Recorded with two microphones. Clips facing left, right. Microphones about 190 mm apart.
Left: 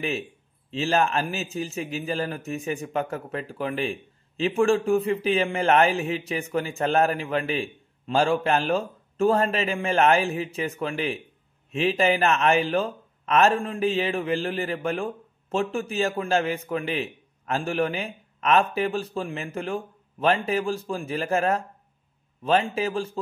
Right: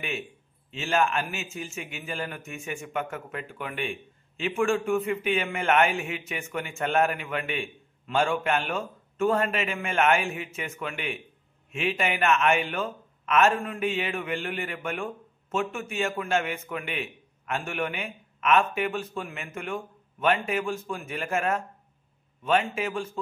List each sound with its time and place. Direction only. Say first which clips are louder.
0.7 s a man's voice: left 3 dB; 35° left (ahead or behind)